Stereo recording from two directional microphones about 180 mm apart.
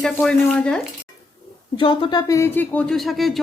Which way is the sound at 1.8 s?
25° left (ahead or behind).